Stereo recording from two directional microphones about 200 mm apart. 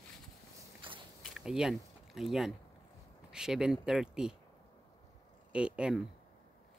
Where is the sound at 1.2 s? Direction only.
Centre (ahead or behind).